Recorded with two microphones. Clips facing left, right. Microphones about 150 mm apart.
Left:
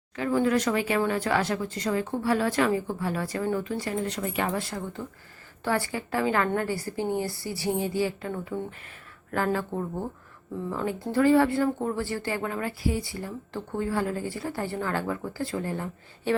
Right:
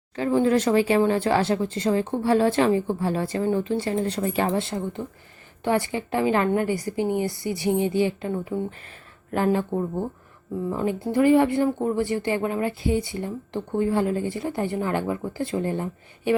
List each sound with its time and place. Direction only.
0.2 s speech: 25° right (ahead or behind)
4.5 s speech: 25° right (ahead or behind)